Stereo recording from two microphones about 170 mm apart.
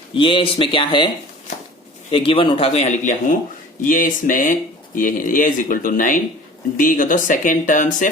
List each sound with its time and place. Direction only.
0.2 s speech: 30° left (ahead or behind); by 8.1 s 50° left (ahead or behind)